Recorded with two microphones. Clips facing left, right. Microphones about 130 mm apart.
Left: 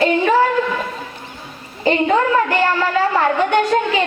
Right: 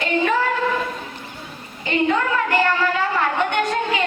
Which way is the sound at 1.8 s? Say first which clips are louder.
Left 5 dB; 35° left (ahead or behind).